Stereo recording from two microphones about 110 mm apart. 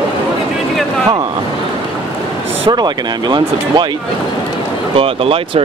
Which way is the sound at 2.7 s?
40° right (ahead or behind).